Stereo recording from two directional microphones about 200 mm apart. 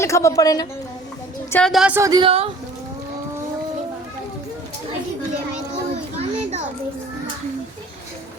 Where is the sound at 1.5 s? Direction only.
5° left (ahead or behind).